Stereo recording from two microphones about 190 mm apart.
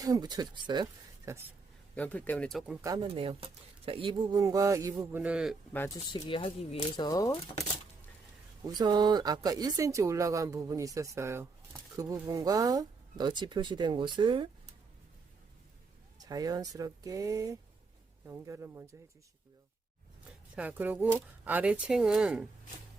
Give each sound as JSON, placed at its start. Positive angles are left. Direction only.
{"t": 0.0, "sound": "speech", "side_deg": -20}
{"t": 2.0, "sound": "speech", "side_deg": 10}
{"t": 2.8, "sound": "speech", "side_deg": -20}
{"t": 5.7, "sound": "speech", "side_deg": 10}
{"t": 6.1, "sound": "speech", "side_deg": 25}
{"t": 7.0, "sound": "speech", "side_deg": 20}
{"t": 8.6, "sound": "speech", "side_deg": -20}
{"t": 16.1, "sound": "speech", "side_deg": -20}
{"t": 20.6, "sound": "speech", "side_deg": -10}